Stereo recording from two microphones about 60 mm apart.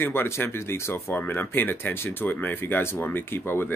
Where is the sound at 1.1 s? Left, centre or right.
Left.